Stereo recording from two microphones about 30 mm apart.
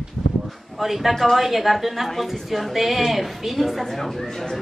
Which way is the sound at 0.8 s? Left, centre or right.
Centre.